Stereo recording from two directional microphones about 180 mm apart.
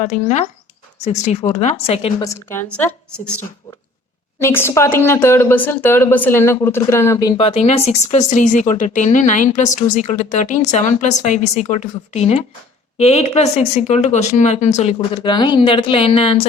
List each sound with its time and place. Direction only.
0.0 s speech: 40° left (ahead or behind)
2.2 s a woman's voice: 15° left (ahead or behind)
4.4 s speech: 15° left (ahead or behind); by 16.5 s 35° left (ahead or behind)